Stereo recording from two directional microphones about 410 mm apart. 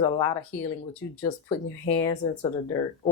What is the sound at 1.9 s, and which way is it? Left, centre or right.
Speech, centre.